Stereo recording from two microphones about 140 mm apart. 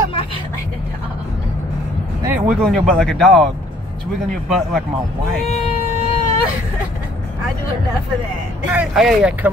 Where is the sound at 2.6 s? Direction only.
5° left (ahead or behind).